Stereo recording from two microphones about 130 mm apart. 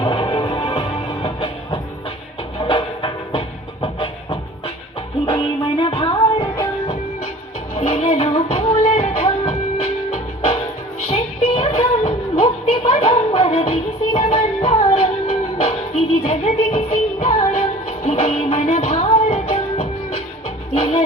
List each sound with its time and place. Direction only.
0.0 s music: 35° left (ahead or behind)
7.8 s music: 55° left (ahead or behind)